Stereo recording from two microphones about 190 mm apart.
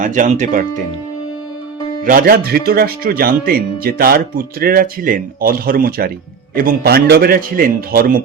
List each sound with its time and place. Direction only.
0.0 s speech: 40° right (ahead or behind)
2.0 s speech: 50° right (ahead or behind)